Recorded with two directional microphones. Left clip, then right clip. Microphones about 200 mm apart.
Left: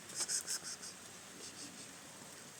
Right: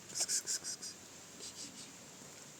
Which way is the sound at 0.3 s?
15° right (ahead or behind).